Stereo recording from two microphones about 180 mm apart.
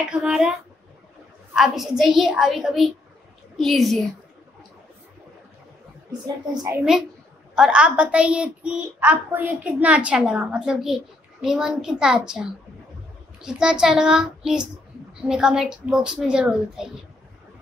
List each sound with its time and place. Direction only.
0.1 s a woman's voice: 5° right (ahead or behind)
1.5 s a woman's voice: centre (ahead or behind)
6.2 s speech: 20° right (ahead or behind)
7.5 s a child's voice: 5° right (ahead or behind)